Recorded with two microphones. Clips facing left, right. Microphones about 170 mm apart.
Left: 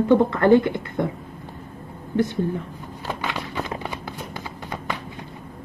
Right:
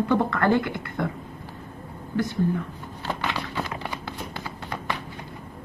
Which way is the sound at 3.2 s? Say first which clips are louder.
Left 1 dB; 15° left (ahead or behind).